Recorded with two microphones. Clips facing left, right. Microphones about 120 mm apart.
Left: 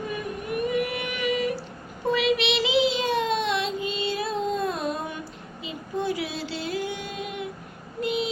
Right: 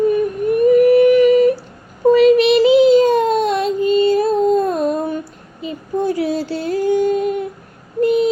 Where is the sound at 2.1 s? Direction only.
45° right (ahead or behind).